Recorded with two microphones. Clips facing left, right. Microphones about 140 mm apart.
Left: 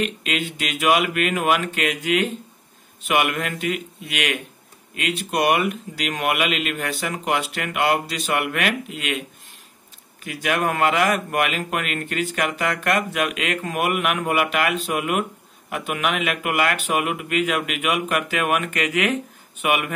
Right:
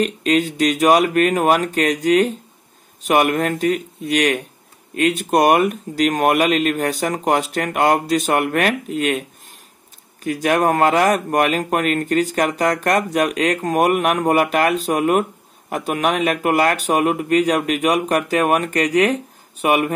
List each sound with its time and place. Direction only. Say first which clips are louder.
0.0 s speech: right 8 dB; 40° right (ahead or behind)
10.2 s speech: right 6 dB; 40° right (ahead or behind)